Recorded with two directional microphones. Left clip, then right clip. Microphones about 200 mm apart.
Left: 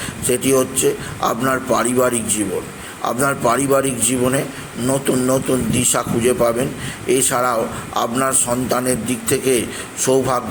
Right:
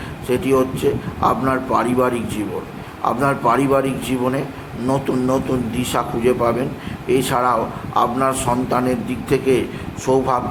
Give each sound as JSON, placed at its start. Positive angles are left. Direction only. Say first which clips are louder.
{"t": 0.3, "sound": "a man's voice", "louder": "even", "side_deg": 15}